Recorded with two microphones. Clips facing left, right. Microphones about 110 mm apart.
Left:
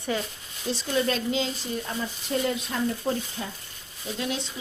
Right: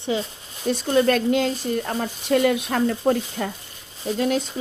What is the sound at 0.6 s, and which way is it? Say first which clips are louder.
Speech: right 7 dB; 50° right (ahead or behind).